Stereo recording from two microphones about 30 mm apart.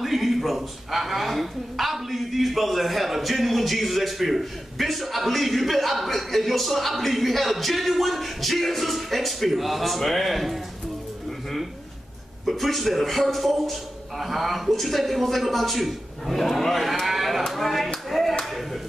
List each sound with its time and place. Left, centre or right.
0.0 s a woman's voice: centre
12.4 s a woman's voice: centre
17.0 s a sound: centre
17.5 s speech: centre
18.4 s clapping: centre